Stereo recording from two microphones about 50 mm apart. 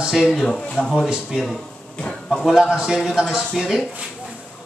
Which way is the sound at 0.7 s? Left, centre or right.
Centre.